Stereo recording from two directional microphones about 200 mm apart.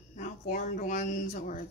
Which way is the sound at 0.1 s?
40° left (ahead or behind).